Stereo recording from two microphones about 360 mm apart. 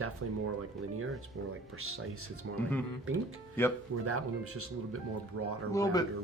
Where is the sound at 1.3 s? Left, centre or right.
Right.